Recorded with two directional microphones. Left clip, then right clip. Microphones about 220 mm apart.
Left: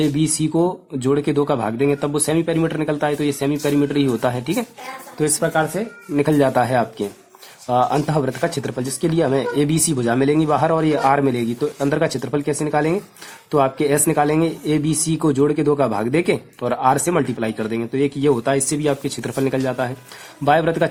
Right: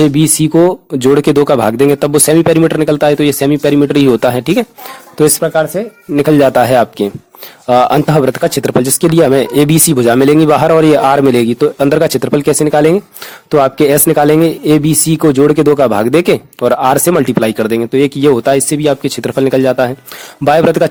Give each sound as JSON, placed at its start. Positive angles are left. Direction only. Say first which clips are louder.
{"t": 0.0, "sound": "speech", "louder": "right 10 dB", "side_deg": -40}